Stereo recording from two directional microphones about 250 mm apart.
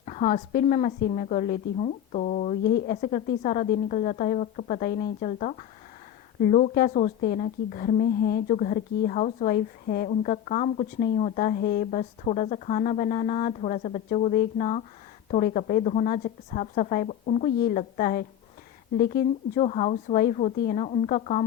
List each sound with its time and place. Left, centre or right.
0.0 s a woman's voice: left